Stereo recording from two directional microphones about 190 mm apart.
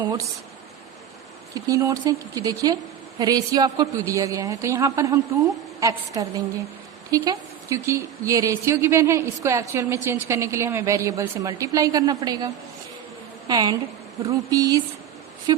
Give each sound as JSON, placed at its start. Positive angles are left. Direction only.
{"t": 0.0, "sound": "speech", "side_deg": -25}
{"t": 1.5, "sound": "speech", "side_deg": -20}
{"t": 13.5, "sound": "speech", "side_deg": -20}